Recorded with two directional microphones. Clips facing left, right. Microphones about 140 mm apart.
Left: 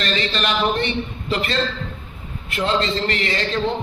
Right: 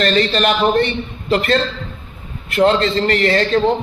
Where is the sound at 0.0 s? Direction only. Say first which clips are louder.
Right 8 dB; 45° right (ahead or behind).